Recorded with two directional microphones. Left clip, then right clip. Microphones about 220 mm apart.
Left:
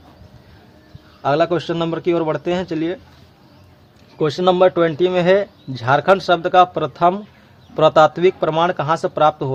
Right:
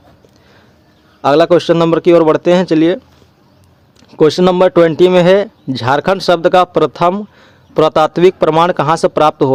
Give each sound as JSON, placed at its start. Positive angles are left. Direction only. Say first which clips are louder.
{"t": 1.2, "sound": "a man's voice", "louder": "right 8 dB", "side_deg": -45}
{"t": 4.2, "sound": "a man's voice", "louder": "right 5 dB", "side_deg": -45}